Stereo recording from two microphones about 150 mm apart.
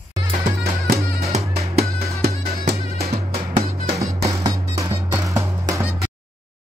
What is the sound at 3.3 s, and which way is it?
Music, 85° right.